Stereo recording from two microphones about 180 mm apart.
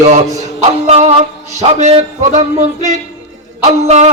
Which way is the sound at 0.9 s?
35° right (ahead or behind).